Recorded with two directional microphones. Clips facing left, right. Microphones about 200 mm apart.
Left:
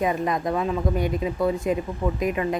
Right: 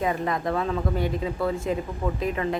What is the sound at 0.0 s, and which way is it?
Speech, 15° left (ahead or behind).